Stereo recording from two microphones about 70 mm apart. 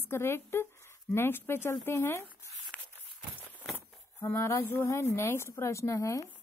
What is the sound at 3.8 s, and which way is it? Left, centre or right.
Speech, left.